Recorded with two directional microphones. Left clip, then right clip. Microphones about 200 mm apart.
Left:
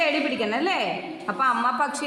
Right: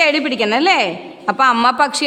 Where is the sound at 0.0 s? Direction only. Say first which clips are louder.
Right 8 dB; 55° right (ahead or behind).